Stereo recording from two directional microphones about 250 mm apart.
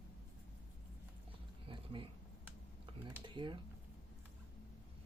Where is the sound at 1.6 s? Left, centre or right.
Centre.